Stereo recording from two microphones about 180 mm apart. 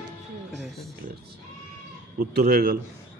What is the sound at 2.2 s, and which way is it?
Speech, 60° right (ahead or behind).